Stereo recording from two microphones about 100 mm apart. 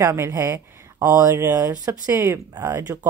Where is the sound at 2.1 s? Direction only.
25° right (ahead or behind).